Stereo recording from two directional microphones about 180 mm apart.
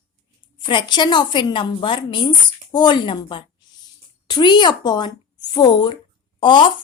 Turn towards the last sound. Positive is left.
turn(degrees=25)  # may be behind; listen again after turning